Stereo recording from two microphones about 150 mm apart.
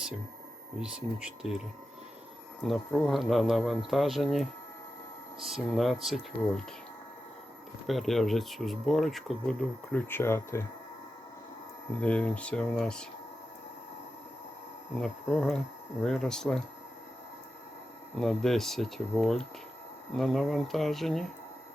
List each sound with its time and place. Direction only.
0.8 s speech: 5° right (ahead or behind)
2.6 s speech: centre (ahead or behind)
7.9 s speech: centre (ahead or behind)
9.9 s speech: 15° left (ahead or behind)
11.9 s speech: 10° left (ahead or behind)
14.9 s speech: centre (ahead or behind)
18.2 s speech: centre (ahead or behind)